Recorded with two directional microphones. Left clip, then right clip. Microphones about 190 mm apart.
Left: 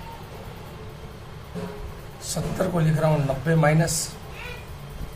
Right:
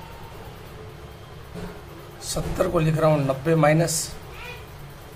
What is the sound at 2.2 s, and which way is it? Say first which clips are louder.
Speech: right 2 dB; 35° right (ahead or behind).